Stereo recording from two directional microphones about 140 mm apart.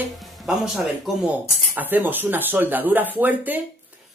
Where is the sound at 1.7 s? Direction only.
10° right (ahead or behind).